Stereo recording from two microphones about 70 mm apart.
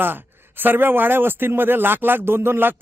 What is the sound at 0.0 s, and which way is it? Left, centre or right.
A man's voice, right.